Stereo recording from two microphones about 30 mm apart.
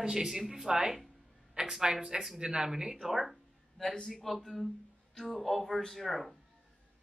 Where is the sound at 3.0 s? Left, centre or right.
Centre.